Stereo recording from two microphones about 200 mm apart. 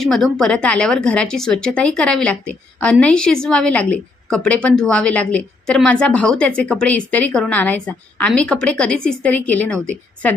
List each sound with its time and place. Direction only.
0.0 s a woman's voice: centre (ahead or behind)